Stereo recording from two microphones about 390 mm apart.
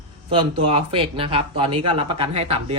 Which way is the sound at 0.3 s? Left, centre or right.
Centre.